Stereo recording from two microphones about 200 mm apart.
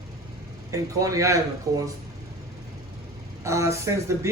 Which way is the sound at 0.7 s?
15° right (ahead or behind).